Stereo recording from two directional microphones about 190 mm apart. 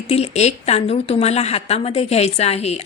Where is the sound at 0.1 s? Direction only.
35° left (ahead or behind).